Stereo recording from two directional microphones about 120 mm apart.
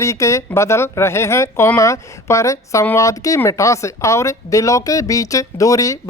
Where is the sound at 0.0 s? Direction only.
25° left (ahead or behind).